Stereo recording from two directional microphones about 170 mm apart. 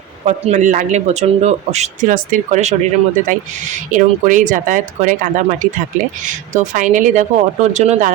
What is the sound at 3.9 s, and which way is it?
Speech, 50° right (ahead or behind).